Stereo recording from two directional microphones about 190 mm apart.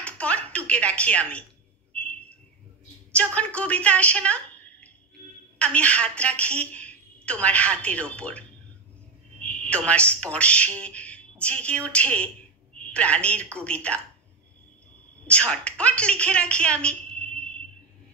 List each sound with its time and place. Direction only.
0.0 s speech: 5° left (ahead or behind)
2.0 s a sound: 5° left (ahead or behind)
3.3 s a woman's voice: 5° left (ahead or behind)
15.2 s a woman's voice: 5° left (ahead or behind)